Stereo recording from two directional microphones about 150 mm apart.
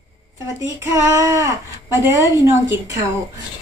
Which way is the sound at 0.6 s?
20° right (ahead or behind).